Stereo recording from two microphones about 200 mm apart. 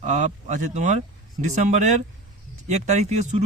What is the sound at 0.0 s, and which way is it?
Speech, 35° right (ahead or behind).